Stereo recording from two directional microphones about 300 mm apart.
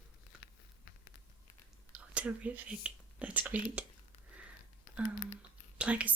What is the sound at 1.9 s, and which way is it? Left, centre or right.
Speech, centre.